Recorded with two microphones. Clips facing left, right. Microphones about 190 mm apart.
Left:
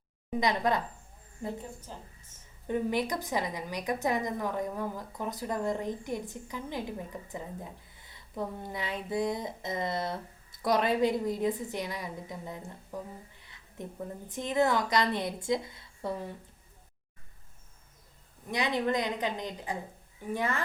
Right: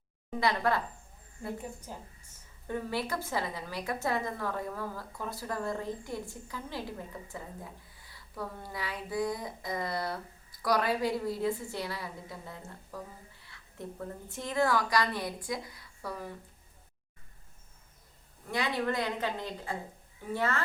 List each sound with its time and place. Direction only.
0.3 s a woman's voice: 20° left (ahead or behind)
1.9 s a woman's voice: 10° right (ahead or behind)
2.6 s a woman's voice: 20° left (ahead or behind)
18.4 s a woman's voice: 20° left (ahead or behind)